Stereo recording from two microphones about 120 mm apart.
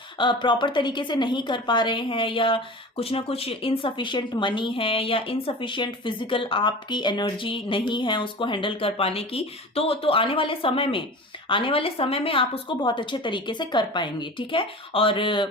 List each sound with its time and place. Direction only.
0.2 s a woman's voice: 40° left (ahead or behind)